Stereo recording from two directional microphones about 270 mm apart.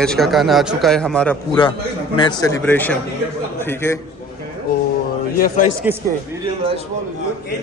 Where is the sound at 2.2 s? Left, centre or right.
Centre.